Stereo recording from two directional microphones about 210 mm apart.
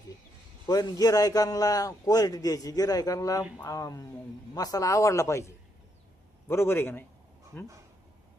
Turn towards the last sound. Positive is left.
turn(degrees=10)  # may be behind; listen again after turning